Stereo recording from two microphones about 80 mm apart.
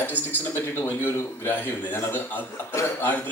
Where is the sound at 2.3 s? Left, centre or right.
Left.